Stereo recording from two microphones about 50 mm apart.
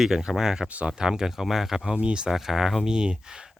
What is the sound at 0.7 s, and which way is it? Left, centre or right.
Speech, right.